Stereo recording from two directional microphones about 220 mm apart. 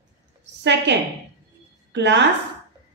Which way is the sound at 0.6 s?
50° right (ahead or behind).